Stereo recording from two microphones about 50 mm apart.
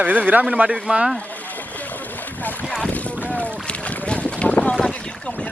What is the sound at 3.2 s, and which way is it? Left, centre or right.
Boat, left.